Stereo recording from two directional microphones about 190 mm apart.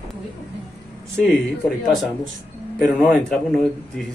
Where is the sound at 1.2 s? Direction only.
Centre (ahead or behind).